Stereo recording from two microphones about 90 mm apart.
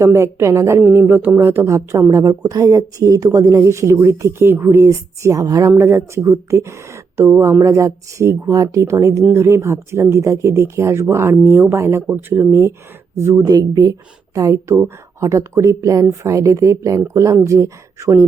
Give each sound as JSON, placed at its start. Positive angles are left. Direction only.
{"t": 0.0, "sound": "speech", "side_deg": -30}
{"t": 0.8, "sound": "speech", "side_deg": -20}
{"t": 13.4, "sound": "speech", "side_deg": -45}